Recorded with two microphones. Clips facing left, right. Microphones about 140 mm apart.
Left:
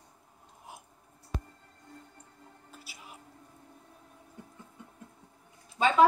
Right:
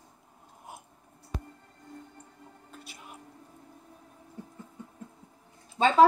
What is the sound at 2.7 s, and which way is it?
Music, 5° left (ahead or behind).